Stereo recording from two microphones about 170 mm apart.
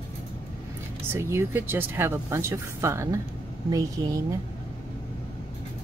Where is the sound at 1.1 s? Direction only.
15° right (ahead or behind).